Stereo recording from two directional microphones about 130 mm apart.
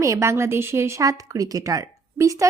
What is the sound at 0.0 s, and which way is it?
Speech, 25° right (ahead or behind).